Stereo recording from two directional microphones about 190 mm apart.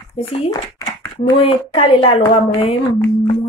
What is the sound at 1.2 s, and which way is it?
Speech, 30° left (ahead or behind).